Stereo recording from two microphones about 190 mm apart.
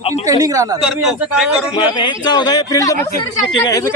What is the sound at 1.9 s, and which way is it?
A man's voice, 25° left (ahead or behind).